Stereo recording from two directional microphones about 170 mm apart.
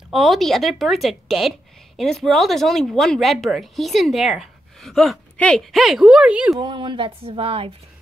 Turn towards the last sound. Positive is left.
turn(degrees=-35)  # may be behind; listen again after turning